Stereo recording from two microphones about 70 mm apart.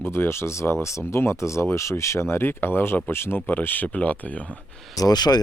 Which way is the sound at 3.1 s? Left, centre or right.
Left.